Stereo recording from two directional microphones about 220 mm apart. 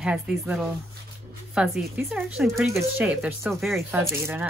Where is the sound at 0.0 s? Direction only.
5° right (ahead or behind).